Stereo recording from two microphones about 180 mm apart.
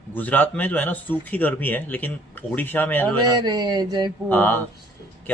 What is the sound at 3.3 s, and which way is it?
Speech, 20° right (ahead or behind).